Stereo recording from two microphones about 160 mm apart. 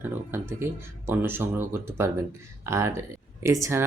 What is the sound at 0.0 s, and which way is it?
Speech, 15° right (ahead or behind).